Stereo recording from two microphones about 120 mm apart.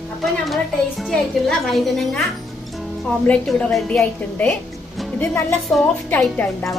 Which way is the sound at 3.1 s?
10° left (ahead or behind).